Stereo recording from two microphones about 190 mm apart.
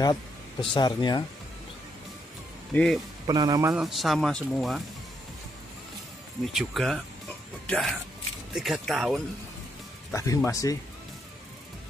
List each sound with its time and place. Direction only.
0.0 s speech: 25° left (ahead or behind)
2.7 s speech: 5° left (ahead or behind)
3.3 s speech: 20° right (ahead or behind)
3.7 s speech: centre (ahead or behind)
6.4 s speech: centre (ahead or behind)
10.1 s speech: 15° left (ahead or behind)